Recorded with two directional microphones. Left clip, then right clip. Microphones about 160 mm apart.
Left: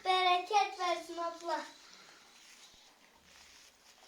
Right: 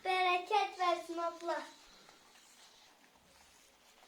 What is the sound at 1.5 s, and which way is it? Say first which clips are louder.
Speech: left 3 dB; 5° right (ahead or behind).